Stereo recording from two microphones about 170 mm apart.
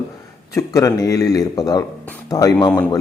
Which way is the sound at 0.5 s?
20° left (ahead or behind).